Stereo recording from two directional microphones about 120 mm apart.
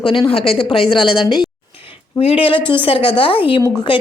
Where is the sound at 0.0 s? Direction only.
45° left (ahead or behind).